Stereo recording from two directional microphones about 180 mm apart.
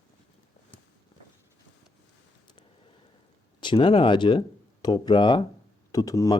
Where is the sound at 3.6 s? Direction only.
25° left (ahead or behind).